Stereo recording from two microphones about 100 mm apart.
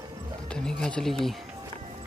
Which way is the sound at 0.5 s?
5° left (ahead or behind).